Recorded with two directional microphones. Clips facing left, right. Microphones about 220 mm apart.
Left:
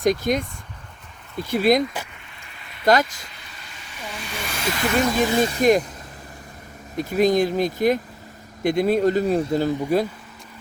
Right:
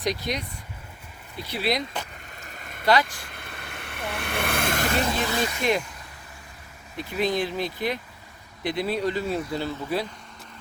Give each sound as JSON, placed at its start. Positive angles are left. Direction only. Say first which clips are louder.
{"t": 0.0, "sound": "speech", "louder": "left 8 dB", "side_deg": 50}
{"t": 1.5, "sound": "speech", "louder": "left 9 dB", "side_deg": 45}
{"t": 2.4, "sound": "rain on surface", "louder": "right 3 dB", "side_deg": -45}
{"t": 2.8, "sound": "speech", "louder": "left 4 dB", "side_deg": 45}
{"t": 3.2, "sound": "vehicle", "louder": "right 4 dB", "side_deg": -55}
{"t": 5.4, "sound": "speech", "louder": "left 9 dB", "side_deg": 40}
{"t": 6.9, "sound": "speech", "louder": "left 7 dB", "side_deg": 45}